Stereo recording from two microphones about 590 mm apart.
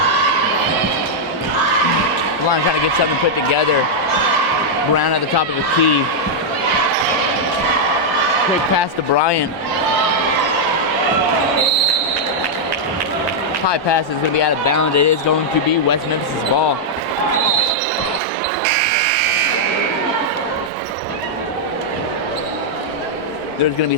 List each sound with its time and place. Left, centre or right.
4.9 s a man's voice: left
9.1 s speech: left
13.7 s speech: left
14.6 s speech: left